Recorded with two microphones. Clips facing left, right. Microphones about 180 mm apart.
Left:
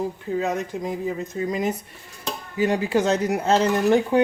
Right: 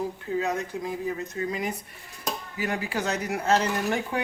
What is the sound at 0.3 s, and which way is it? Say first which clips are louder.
Speech: left 3 dB; 20° left (ahead or behind).